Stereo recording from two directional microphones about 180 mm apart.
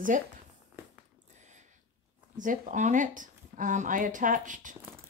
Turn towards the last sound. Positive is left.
turn(degrees=-45)  # may be behind; listen again after turning